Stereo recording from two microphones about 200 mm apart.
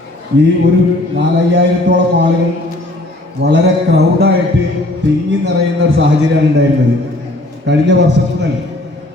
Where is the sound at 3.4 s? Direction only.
55° right (ahead or behind).